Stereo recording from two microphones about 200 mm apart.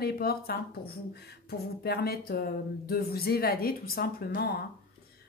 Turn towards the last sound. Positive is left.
turn(degrees=50)  # may be behind; listen again after turning